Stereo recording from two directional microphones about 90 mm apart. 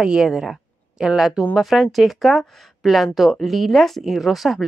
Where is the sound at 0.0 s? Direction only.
5° right (ahead or behind).